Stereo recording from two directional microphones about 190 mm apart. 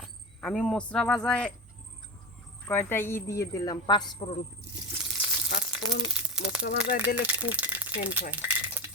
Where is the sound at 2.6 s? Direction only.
10° left (ahead or behind).